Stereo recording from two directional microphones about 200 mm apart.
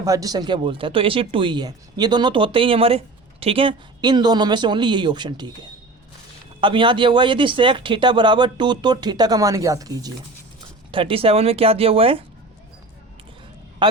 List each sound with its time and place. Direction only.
0.0 s speech: 15° right (ahead or behind)
10.9 s speech: 30° right (ahead or behind)